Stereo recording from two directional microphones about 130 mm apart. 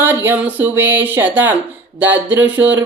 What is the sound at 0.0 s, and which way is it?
Speech, 15° right (ahead or behind).